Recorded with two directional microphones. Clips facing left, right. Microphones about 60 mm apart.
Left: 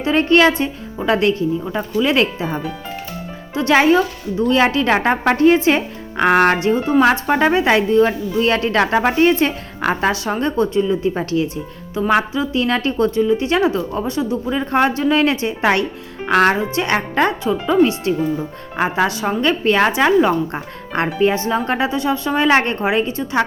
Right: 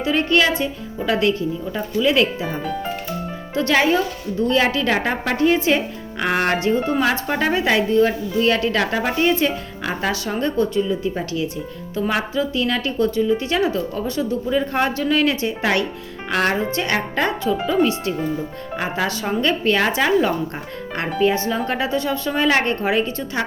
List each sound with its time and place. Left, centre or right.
0.0 s a woman's voice: left
6.7 s a woman's voice: centre
12.6 s a woman's voice: left
18.8 s a woman's voice: left
20.5 s a woman's voice: left